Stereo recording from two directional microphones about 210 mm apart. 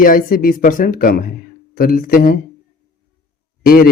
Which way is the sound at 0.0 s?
40° left (ahead or behind).